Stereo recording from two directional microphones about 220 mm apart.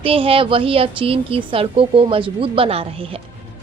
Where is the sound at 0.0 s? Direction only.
25° right (ahead or behind).